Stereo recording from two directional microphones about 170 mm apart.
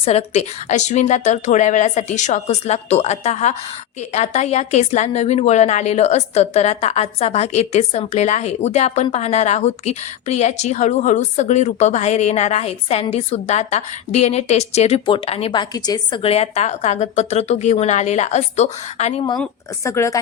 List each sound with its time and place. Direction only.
0.0 s a woman's voice: 40° left (ahead or behind)
15.7 s a woman's voice: 20° left (ahead or behind)
16.2 s a woman's voice: 35° left (ahead or behind)
19.8 s speech: 15° left (ahead or behind)